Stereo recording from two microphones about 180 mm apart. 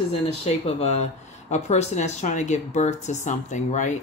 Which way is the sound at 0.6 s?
35° left (ahead or behind).